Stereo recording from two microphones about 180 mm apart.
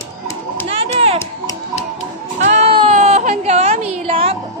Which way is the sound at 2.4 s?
40° right (ahead or behind).